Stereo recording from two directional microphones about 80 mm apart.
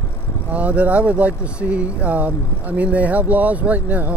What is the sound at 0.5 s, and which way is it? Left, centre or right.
Speech, centre.